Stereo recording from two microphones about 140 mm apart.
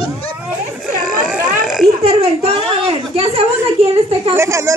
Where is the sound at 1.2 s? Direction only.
5° right (ahead or behind).